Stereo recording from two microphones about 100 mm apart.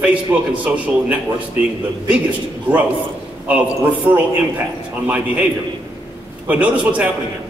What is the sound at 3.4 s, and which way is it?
A man's voice, 15° right (ahead or behind).